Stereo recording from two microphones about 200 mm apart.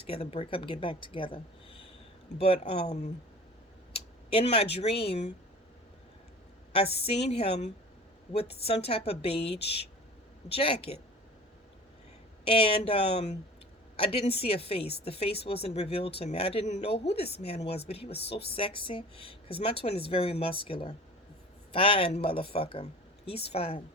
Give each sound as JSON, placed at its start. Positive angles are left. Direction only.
{"t": 0.0, "sound": "speech", "side_deg": 30}
{"t": 6.7, "sound": "speech", "side_deg": 30}
{"t": 12.5, "sound": "speech", "side_deg": 25}